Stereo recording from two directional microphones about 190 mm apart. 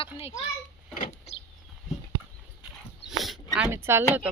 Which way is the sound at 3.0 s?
Centre (ahead or behind).